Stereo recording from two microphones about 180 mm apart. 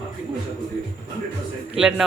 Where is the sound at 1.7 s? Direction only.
5° right (ahead or behind).